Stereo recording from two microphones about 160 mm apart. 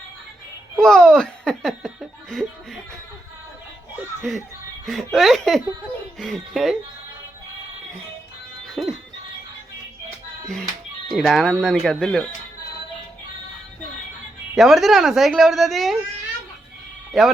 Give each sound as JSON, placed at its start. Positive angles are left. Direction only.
{"t": 0.8, "sound": "speech", "side_deg": 5}
{"t": 4.2, "sound": "a woman's voice", "side_deg": 0}
{"t": 8.8, "sound": "a sound", "side_deg": 0}
{"t": 10.4, "sound": "a woman's voice", "side_deg": 5}
{"t": 14.5, "sound": "a woman's voice", "side_deg": 0}
{"t": 17.1, "sound": "speech", "side_deg": 0}